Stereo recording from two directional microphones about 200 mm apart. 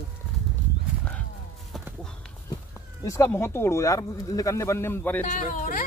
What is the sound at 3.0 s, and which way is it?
Speech, 15° left (ahead or behind).